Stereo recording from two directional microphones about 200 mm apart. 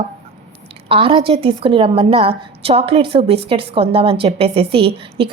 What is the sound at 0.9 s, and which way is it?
A woman's voice, 30° right (ahead or behind).